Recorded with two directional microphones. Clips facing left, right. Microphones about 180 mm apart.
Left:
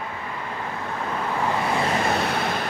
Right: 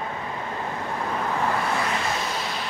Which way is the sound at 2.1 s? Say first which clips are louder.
Left 5 dB; 60° left (ahead or behind).